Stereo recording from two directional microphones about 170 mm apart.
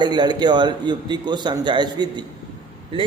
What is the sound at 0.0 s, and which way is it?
A man's voice, 25° right (ahead or behind).